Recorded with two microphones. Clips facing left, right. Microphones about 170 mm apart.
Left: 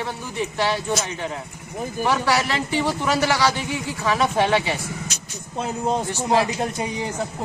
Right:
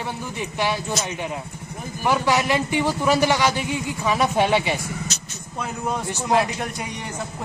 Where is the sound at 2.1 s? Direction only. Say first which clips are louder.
Right 2 dB; 15° right (ahead or behind).